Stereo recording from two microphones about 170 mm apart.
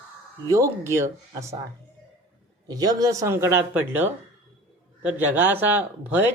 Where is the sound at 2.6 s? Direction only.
20° right (ahead or behind).